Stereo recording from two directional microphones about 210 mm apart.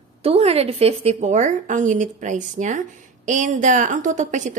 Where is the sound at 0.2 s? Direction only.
30° right (ahead or behind).